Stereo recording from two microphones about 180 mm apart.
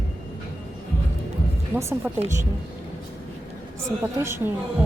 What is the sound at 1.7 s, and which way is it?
Speech, 15° right (ahead or behind).